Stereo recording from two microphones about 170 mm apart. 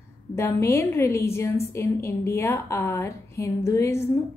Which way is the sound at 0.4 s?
15° left (ahead or behind).